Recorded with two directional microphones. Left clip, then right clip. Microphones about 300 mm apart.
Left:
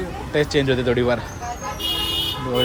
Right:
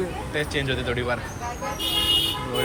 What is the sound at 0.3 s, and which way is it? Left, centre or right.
Speech, centre.